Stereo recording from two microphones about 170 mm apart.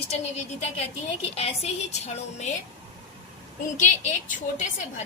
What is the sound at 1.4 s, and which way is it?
A woman's voice, 35° left (ahead or behind).